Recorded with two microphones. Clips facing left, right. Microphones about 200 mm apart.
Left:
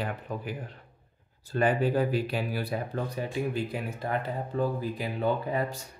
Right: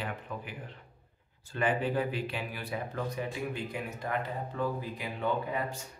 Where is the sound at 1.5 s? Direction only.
40° left (ahead or behind).